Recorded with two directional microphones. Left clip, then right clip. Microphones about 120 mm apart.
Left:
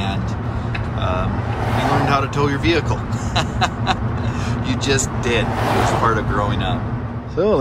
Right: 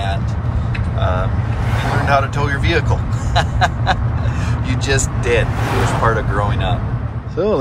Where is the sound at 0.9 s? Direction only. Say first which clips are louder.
Right 2 dB; 25° left (ahead or behind).